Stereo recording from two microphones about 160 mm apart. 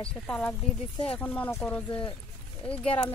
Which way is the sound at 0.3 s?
10° left (ahead or behind).